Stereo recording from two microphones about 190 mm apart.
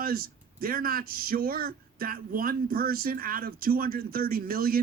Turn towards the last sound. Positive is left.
turn(degrees=-50)  # may be behind; listen again after turning